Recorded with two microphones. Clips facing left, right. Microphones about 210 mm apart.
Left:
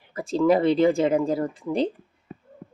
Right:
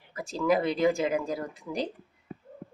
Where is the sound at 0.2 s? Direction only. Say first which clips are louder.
Left 6 dB; 30° left (ahead or behind).